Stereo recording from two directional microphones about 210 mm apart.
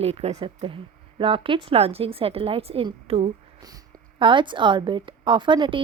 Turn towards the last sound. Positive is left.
turn(degrees=-25)  # may be behind; listen again after turning